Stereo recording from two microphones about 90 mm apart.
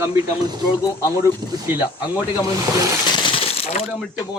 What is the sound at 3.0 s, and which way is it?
Coin, 55° left (ahead or behind).